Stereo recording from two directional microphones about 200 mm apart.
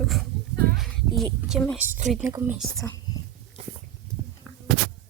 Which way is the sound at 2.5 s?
Centre (ahead or behind).